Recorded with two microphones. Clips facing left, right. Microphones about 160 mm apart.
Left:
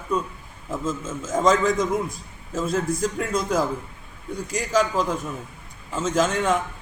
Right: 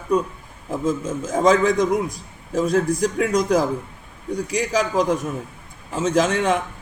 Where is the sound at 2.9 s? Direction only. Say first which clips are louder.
Right 4 dB; 10° right (ahead or behind).